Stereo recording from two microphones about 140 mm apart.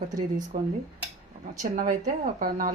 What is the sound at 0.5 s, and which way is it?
A woman's voice, 80° right.